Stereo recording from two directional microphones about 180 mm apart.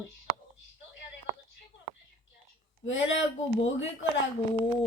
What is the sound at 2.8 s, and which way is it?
Speech, 90° left.